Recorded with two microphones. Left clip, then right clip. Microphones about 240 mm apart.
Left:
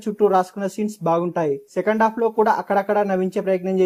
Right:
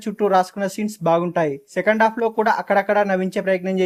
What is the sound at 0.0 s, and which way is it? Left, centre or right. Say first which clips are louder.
Speech: even; right.